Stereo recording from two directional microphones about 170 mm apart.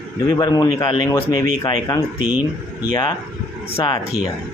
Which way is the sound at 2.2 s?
10° right (ahead or behind).